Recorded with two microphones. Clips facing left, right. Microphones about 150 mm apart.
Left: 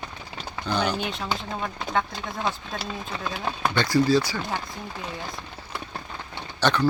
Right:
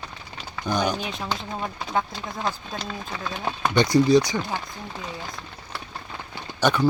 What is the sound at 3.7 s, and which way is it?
Speech, 20° right (ahead or behind).